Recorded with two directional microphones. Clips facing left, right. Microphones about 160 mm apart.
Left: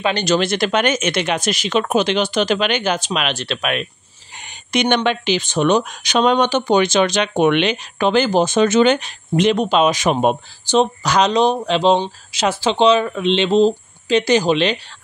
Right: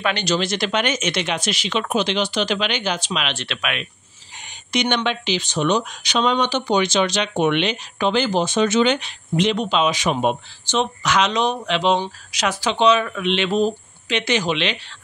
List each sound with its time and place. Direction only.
0.1 s speech: 50° left (ahead or behind)
4.7 s speech: 50° left (ahead or behind)